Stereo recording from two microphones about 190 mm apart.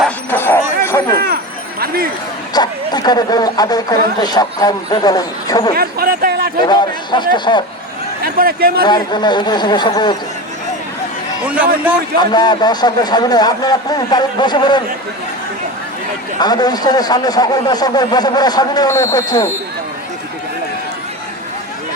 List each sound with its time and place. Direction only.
0.3 s a sound: 10° left (ahead or behind)
1.8 s speech: 55° right (ahead or behind)
2.5 s speech: 20° left (ahead or behind)
5.7 s a sound: 50° right (ahead or behind)
6.7 s speech: 25° left (ahead or behind)
8.2 s speech: 50° right (ahead or behind)
8.8 s speech: 25° left (ahead or behind)
11.4 s a man's voice: 5° right (ahead or behind)
12.2 s speech: 20° left (ahead or behind)
16.4 s speech: 20° left (ahead or behind)